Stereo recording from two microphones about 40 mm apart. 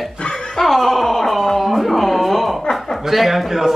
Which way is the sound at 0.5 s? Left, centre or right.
Centre.